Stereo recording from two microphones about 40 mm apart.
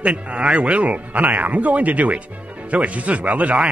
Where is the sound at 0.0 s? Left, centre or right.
Right.